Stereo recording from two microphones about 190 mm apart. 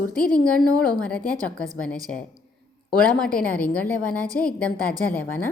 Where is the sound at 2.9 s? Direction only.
5° left (ahead or behind).